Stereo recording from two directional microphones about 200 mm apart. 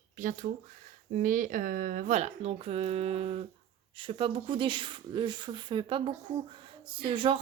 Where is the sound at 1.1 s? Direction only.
45° right (ahead or behind).